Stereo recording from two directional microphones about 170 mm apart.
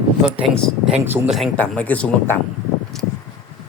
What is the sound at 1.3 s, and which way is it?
Speech, 5° left (ahead or behind).